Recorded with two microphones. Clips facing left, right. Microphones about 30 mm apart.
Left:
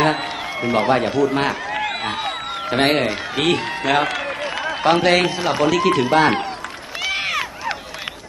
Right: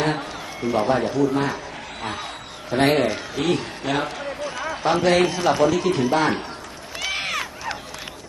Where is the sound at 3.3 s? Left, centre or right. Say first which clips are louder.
Left 4 dB; left.